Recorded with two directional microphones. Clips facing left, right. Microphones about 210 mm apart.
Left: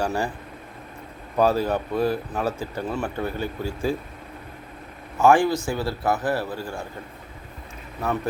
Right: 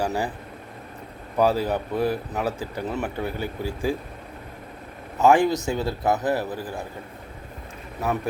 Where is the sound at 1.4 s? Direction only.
15° right (ahead or behind).